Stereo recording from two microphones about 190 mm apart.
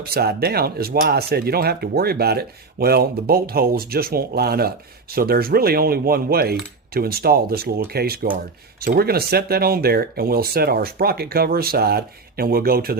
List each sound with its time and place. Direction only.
0.1 s speech: 55° right (ahead or behind)